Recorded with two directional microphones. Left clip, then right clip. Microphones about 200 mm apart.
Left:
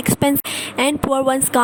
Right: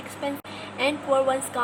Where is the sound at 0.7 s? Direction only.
55° left (ahead or behind).